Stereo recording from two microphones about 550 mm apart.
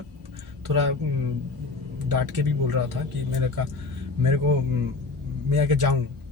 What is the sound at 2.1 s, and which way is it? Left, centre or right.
Speech, right.